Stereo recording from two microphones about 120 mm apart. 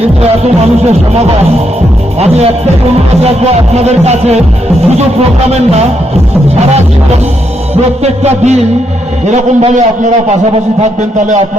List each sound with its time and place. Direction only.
0.0 s music: 60° right (ahead or behind)
5.5 s a man's voice: 65° right (ahead or behind)
8.0 s a man's voice: 65° right (ahead or behind)